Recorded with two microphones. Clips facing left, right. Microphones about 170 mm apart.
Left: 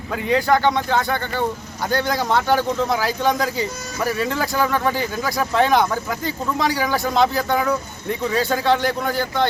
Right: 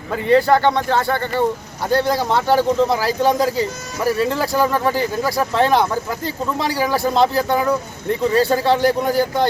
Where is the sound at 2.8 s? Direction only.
30° right (ahead or behind).